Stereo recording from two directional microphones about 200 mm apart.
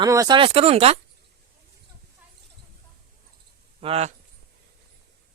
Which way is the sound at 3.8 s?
30° right (ahead or behind).